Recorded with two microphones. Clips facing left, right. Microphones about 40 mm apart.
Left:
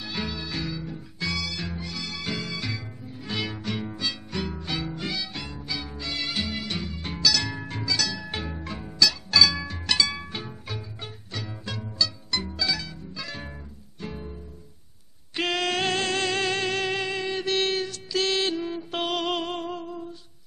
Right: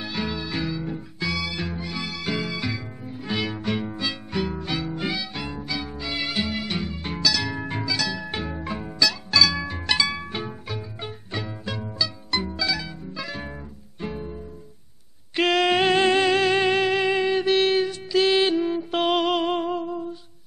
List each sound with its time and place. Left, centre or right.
0.3 s music: centre
4.9 s music: centre
9.3 s music: centre
9.7 s music: centre
15.3 s music: centre
15.7 s music: centre